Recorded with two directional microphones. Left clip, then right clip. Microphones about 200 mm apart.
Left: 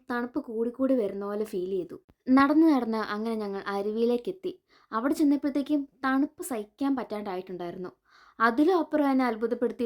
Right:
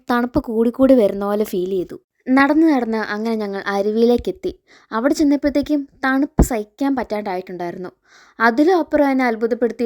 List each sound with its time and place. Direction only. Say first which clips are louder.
0.1 s speech: right 13 dB; 45° right (ahead or behind)
2.3 s a woman's voice: right 7 dB; 25° right (ahead or behind)